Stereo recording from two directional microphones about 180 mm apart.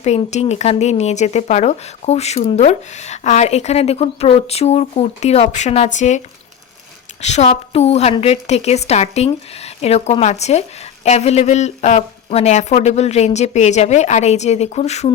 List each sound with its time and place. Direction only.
0.0 s speech: 35° left (ahead or behind)